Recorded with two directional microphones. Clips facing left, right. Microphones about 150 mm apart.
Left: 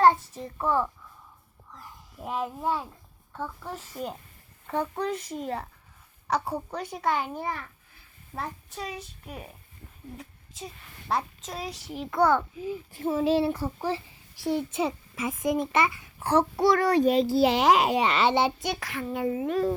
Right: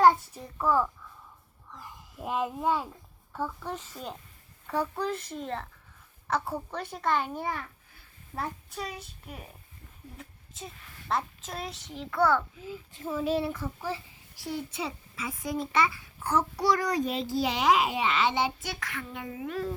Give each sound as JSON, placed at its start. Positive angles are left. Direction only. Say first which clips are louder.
{"t": 0.0, "sound": "a child's voice", "louder": "left 1 dB", "side_deg": -5}
{"t": 3.7, "sound": "a child's voice", "louder": "left 2 dB", "side_deg": 5}
{"t": 4.7, "sound": "a child's voice", "louder": "left 1 dB", "side_deg": -5}
{"t": 6.7, "sound": "a child's voice", "louder": "left 1 dB", "side_deg": 0}
{"t": 10.2, "sound": "a sound", "louder": "right 1 dB", "side_deg": 0}
{"t": 11.4, "sound": "a child's voice", "louder": "left 2 dB", "side_deg": 0}
{"t": 13.0, "sound": "a child's voice", "louder": "left 5 dB", "side_deg": 30}
{"t": 15.7, "sound": "a child's voice", "louder": "left 2 dB", "side_deg": 55}
{"t": 16.4, "sound": "a child's voice", "louder": "left 5 dB", "side_deg": 25}
{"t": 17.3, "sound": "a child's voice", "louder": "even", "side_deg": 35}